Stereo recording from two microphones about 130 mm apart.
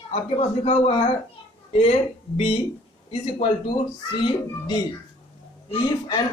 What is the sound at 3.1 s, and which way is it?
Speech, 45° left (ahead or behind).